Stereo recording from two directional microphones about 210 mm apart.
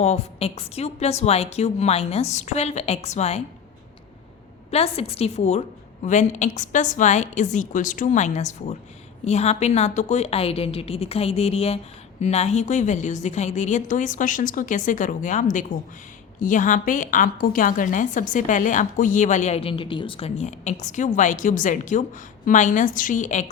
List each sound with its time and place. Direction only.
0.0 s a woman's voice: 30° left (ahead or behind)
4.7 s a woman's voice: 30° left (ahead or behind)